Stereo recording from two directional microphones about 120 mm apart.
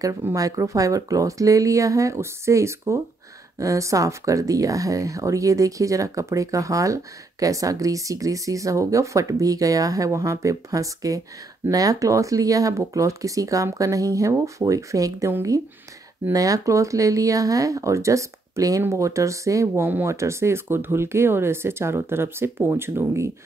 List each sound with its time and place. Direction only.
0.0 s speech: 25° right (ahead or behind)